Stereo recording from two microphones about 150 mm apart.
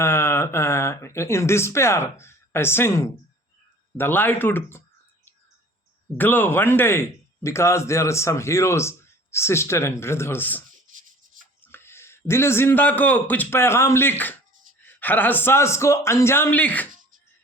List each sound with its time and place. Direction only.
0.0 s speech: 15° left (ahead or behind)
6.1 s speech: 15° left (ahead or behind)
11.6 s a man's voice: 15° left (ahead or behind)